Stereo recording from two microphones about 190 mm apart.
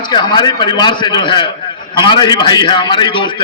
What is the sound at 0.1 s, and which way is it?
A man's voice, 25° left (ahead or behind).